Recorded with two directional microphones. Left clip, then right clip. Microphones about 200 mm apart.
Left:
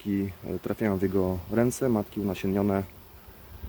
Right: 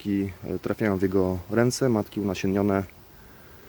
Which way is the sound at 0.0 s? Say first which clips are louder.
Right 3 dB; 25° right (ahead or behind).